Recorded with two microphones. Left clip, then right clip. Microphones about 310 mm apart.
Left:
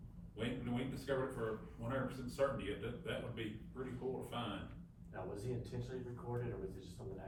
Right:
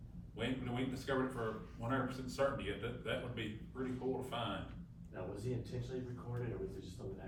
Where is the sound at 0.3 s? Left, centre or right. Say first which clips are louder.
Right 2 dB; centre.